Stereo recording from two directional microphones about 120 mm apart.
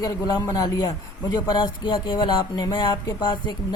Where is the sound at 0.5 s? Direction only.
30° left (ahead or behind).